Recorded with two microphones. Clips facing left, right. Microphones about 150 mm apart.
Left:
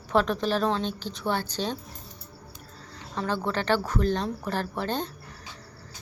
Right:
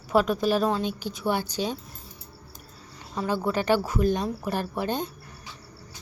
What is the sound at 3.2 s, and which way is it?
A woman's voice, 10° right (ahead or behind).